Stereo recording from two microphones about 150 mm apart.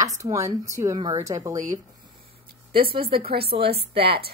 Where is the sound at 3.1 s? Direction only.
90° right.